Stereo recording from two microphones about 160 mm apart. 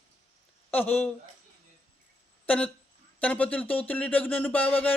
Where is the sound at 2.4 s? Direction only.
10° left (ahead or behind).